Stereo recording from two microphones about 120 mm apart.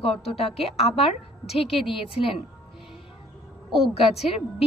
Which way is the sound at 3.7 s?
Centre (ahead or behind).